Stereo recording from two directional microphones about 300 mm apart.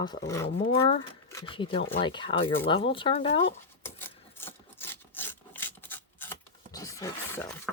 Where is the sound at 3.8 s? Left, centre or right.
Centre.